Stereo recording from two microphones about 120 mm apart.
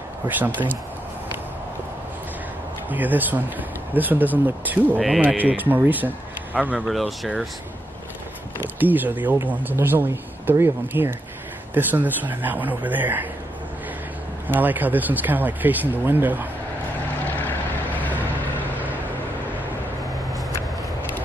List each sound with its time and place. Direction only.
2.9 s speech: 15° right (ahead or behind)
6.9 s speech: centre (ahead or behind)
8.5 s speech: 15° right (ahead or behind)
14.5 s speech: 15° right (ahead or behind)
17.2 s vehicle: 15° left (ahead or behind)